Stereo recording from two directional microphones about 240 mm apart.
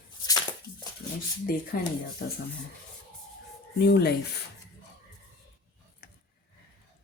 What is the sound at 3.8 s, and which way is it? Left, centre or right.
Speech, left.